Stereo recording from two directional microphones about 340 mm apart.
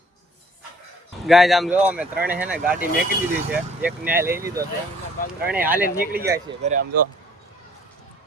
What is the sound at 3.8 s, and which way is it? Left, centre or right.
Speech, centre.